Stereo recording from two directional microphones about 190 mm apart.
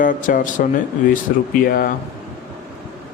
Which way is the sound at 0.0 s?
45° left (ahead or behind).